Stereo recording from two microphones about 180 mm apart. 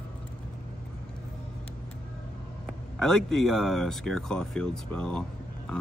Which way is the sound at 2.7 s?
5° left (ahead or behind).